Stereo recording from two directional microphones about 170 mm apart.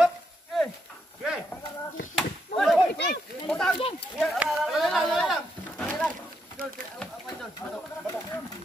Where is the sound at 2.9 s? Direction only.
60° left (ahead or behind).